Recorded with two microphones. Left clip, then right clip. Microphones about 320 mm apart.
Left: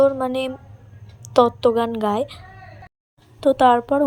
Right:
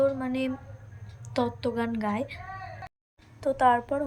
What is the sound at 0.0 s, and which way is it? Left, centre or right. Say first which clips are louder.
Speech: left 9 dB; centre.